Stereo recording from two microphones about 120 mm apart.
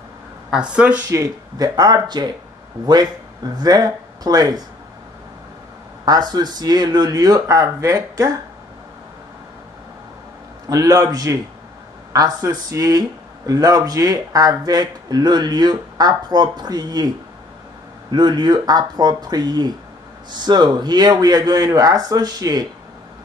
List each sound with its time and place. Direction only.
0.5 s speech: 10° right (ahead or behind)
1.0 s speech: 30° right (ahead or behind)
3.5 s speech: 35° right (ahead or behind)
6.0 s speech: 35° right (ahead or behind)
10.7 s speech: 30° right (ahead or behind)
18.1 s speech: 35° right (ahead or behind)